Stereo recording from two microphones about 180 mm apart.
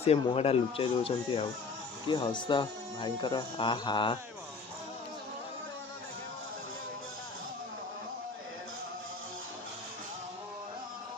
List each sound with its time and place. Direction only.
0.0 s speech: 35° left (ahead or behind)